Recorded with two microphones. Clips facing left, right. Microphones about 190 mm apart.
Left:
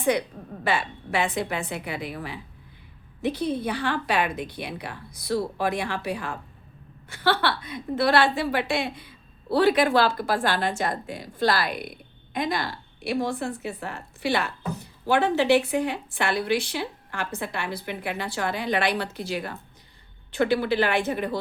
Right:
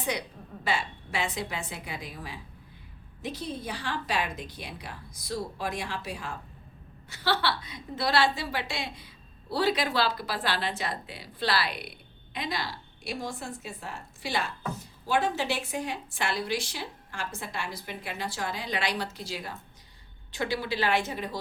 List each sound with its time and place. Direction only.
0.0 s a woman's voice: 55° left (ahead or behind)